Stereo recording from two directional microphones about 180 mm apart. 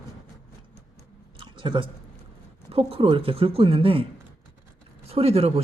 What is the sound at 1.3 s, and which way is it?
Chewing, 25° right (ahead or behind).